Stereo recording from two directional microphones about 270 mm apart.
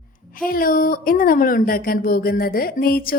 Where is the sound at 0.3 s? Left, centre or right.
Left.